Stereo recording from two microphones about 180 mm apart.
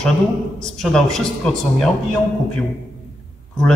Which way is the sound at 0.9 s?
5° left (ahead or behind).